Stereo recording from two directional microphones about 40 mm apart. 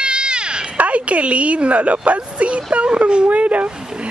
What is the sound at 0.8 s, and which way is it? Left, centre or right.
A woman's voice, right.